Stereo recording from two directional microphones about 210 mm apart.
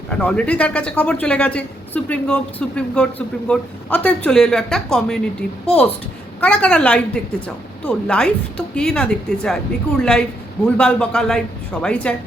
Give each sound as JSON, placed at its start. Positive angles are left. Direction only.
{"t": 0.1, "sound": "a man's voice", "side_deg": 5}